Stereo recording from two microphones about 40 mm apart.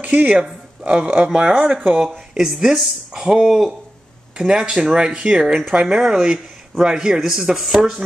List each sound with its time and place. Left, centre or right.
0.0 s speech: right
0.8 s speech: right
1.6 s speech: right
2.0 s speech: centre
3.2 s speech: centre
3.4 s speech: centre
4.5 s speech: right
5.9 s speech: centre